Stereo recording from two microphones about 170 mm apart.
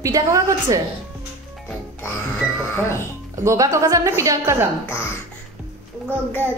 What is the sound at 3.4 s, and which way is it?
A woman's voice, 20° right (ahead or behind).